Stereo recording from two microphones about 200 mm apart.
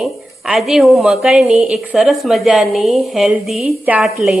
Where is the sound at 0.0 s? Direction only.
Centre (ahead or behind).